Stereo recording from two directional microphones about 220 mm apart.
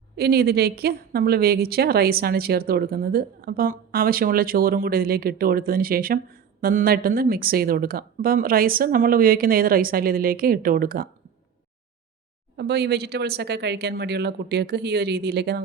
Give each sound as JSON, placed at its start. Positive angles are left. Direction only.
{"t": 0.2, "sound": "a woman's voice", "side_deg": -45}
{"t": 12.5, "sound": "a woman's voice", "side_deg": -50}